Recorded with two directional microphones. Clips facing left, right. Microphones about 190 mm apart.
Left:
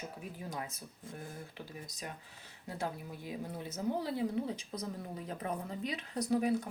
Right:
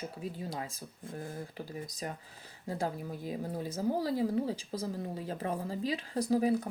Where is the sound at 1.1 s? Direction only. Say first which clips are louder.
Right 6 dB; 40° right (ahead or behind).